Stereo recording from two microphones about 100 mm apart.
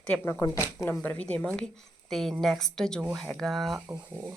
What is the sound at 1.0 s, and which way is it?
A woman's voice, 10° left (ahead or behind).